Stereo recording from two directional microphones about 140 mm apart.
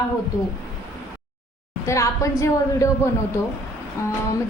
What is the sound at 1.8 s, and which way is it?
A woman's voice, 20° left (ahead or behind).